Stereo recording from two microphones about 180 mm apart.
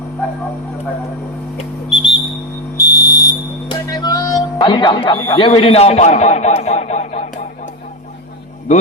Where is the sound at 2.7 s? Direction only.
20° left (ahead or behind); by 7.5 s 40° left (ahead or behind).